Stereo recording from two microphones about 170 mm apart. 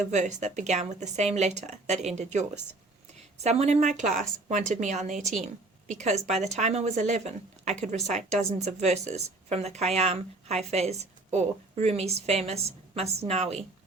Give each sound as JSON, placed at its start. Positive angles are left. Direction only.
{"t": 0.0, "sound": "speech", "side_deg": -45}